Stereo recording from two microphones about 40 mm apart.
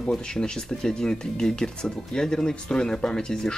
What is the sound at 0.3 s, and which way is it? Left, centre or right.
Speech, centre.